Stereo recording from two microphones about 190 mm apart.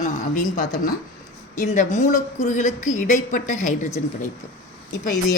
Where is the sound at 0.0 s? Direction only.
40° left (ahead or behind).